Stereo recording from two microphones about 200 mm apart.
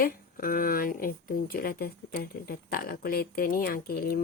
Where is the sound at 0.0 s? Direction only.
45° left (ahead or behind).